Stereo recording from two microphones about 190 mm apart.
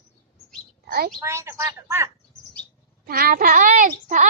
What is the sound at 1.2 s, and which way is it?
Speech, 15° right (ahead or behind).